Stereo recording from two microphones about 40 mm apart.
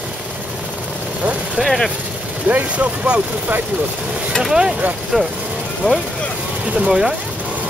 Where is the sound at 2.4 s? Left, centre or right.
Right.